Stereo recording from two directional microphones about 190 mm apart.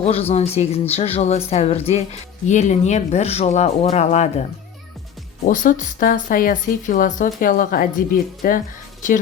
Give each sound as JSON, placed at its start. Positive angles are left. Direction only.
{"t": 0.0, "sound": "speech", "side_deg": 30}
{"t": 5.5, "sound": "a woman's voice", "side_deg": 40}